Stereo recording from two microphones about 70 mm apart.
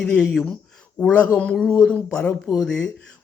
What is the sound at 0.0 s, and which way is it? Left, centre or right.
Speech, centre.